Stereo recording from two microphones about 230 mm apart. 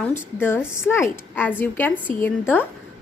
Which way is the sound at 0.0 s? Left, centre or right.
Centre.